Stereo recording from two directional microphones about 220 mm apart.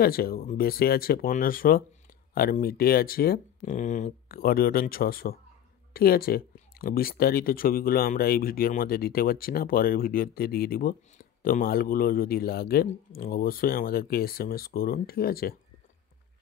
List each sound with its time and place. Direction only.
0.0 s speech: 45° left (ahead or behind)